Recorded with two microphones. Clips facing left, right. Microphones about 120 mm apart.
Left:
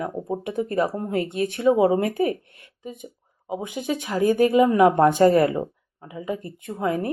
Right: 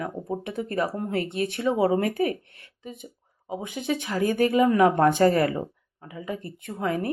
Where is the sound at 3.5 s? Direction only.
10° left (ahead or behind).